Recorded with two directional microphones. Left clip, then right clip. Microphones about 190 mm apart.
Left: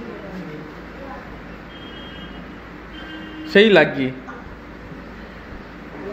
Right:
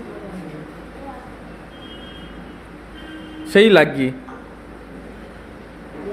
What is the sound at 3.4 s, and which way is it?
Speech, 15° right (ahead or behind).